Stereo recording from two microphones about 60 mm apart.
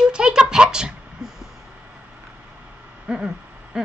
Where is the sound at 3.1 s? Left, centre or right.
Centre.